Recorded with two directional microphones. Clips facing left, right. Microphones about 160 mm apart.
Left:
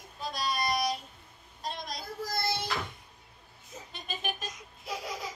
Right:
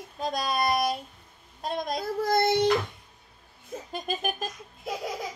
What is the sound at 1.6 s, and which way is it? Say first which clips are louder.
Child singing: right 9 dB; 55° right (ahead or behind).